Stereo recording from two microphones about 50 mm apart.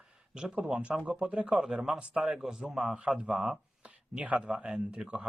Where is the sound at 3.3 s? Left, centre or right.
Centre.